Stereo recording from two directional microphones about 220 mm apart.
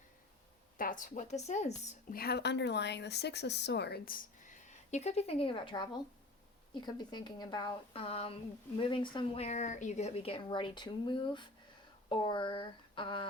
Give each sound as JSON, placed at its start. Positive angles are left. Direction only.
{"t": 0.8, "sound": "a woman's voice", "side_deg": 35}